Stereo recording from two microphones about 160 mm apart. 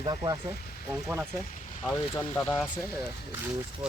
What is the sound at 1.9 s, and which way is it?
Speech, 15° left (ahead or behind).